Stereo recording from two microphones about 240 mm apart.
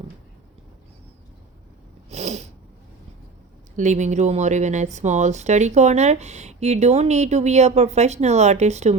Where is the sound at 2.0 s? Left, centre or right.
Right.